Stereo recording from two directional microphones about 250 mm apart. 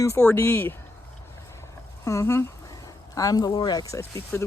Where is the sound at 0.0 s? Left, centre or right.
Centre.